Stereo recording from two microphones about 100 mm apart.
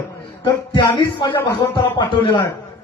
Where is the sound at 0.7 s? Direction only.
45° left (ahead or behind).